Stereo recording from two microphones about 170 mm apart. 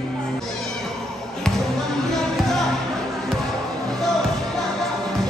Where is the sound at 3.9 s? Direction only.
Centre (ahead or behind).